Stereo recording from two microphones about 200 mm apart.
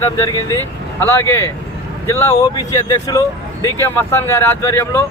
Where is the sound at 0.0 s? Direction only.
15° left (ahead or behind).